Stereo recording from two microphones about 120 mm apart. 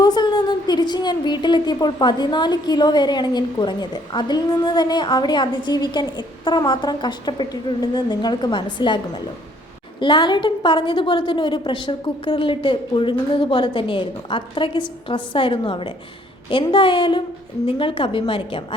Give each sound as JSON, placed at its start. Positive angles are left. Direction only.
{"t": 0.0, "sound": "a woman's voice", "side_deg": 35}